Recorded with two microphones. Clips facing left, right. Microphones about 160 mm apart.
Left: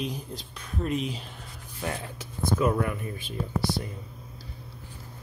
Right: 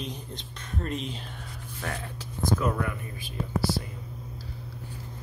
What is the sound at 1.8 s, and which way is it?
Speech, 15° left (ahead or behind).